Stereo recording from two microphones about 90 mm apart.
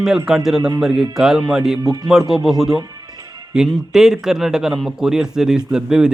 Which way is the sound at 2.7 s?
45° right (ahead or behind).